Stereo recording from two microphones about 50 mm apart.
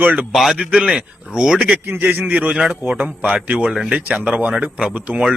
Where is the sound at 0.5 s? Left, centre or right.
Centre.